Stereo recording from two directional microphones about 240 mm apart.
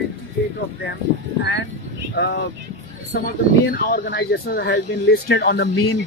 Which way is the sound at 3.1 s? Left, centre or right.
Left.